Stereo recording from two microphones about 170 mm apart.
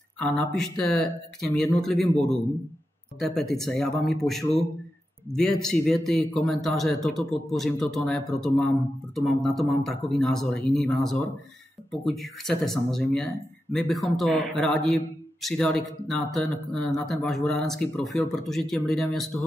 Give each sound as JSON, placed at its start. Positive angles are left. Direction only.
{"t": 0.6, "sound": "speech", "side_deg": 0}